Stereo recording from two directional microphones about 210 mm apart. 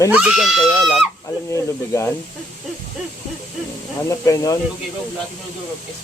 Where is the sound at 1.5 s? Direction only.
15° left (ahead or behind).